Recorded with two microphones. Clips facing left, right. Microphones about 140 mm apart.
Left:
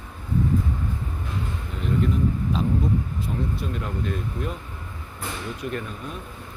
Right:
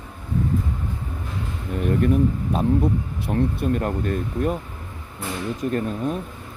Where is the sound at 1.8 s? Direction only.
60° right (ahead or behind).